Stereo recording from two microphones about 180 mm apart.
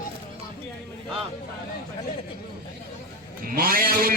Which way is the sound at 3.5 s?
55° right (ahead or behind).